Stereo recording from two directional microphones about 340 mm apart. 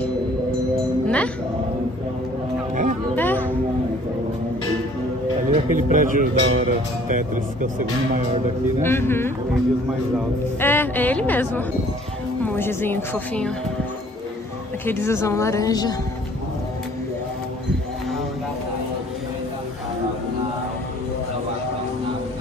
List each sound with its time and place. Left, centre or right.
1.0 s music: centre
2.7 s music: right
3.2 s music: centre
5.5 s speech: right
8.8 s a woman's voice: centre
10.6 s a woman's voice: centre
14.9 s a woman's voice: centre